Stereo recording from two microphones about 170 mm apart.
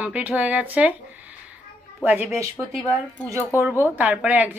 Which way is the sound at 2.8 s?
10° left (ahead or behind).